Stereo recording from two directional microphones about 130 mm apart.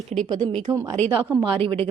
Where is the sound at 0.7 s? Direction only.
30° right (ahead or behind).